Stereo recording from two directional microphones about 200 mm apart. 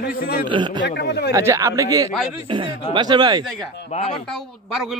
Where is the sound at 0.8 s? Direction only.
60° left (ahead or behind).